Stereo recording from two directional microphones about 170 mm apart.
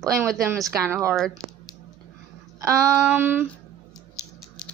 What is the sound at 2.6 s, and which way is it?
Speech, 15° right (ahead or behind).